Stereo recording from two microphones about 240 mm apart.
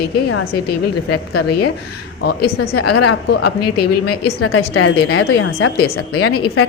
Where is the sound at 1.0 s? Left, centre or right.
Left.